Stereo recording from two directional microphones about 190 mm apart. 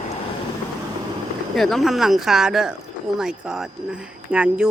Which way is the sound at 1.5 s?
Centre (ahead or behind).